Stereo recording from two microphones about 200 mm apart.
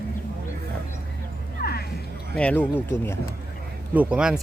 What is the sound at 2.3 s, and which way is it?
Speech, 5° left (ahead or behind).